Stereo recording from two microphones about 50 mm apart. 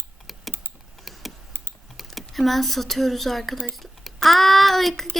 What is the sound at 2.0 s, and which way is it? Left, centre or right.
Speech, centre.